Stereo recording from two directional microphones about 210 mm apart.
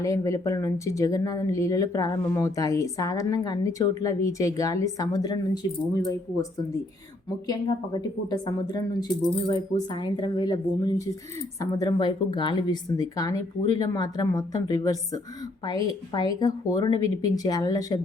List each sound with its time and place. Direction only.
0.0 s speech: 15° left (ahead or behind)